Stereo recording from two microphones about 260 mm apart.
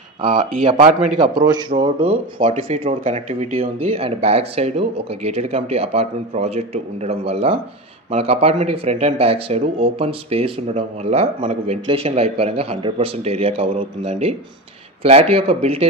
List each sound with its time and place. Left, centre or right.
0.7 s speech: right